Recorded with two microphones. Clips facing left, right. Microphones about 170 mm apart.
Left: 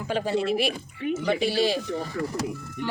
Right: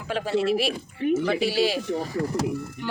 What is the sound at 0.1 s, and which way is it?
Speech, centre (ahead or behind).